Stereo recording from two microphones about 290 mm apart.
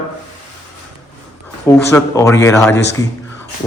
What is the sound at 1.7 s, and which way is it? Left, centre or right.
Speech, centre.